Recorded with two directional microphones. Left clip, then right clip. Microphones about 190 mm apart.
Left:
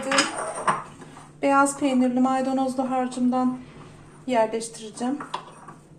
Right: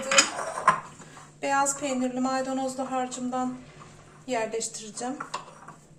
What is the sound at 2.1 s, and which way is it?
A woman's voice, 30° left (ahead or behind).